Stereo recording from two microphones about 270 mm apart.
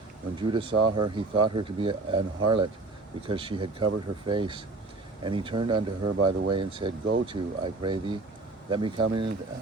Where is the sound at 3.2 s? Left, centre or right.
Centre.